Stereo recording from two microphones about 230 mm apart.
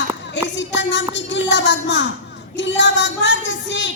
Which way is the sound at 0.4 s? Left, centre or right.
Left.